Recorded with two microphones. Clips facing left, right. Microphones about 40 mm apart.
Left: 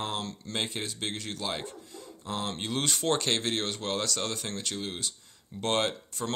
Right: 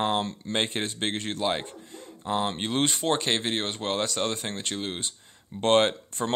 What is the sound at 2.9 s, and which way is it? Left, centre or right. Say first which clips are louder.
Speech: right 2 dB; centre.